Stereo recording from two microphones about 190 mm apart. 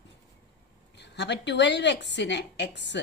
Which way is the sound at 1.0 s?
65° left (ahead or behind).